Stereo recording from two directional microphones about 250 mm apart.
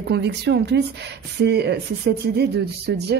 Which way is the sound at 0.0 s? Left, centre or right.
Right.